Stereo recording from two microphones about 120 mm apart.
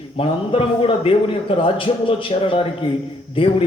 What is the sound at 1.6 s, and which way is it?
A man's voice, 50° left (ahead or behind).